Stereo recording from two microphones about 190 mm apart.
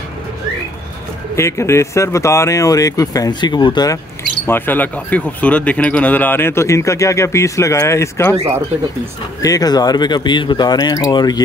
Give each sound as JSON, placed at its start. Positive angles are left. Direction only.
{"t": 1.3, "sound": "speech", "side_deg": 15}
{"t": 4.5, "sound": "speech", "side_deg": 10}
{"t": 9.4, "sound": "speech", "side_deg": 20}